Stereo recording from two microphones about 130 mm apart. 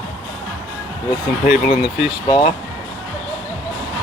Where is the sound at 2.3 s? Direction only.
40° left (ahead or behind).